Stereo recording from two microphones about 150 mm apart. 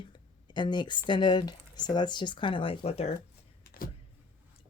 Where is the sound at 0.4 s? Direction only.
30° left (ahead or behind).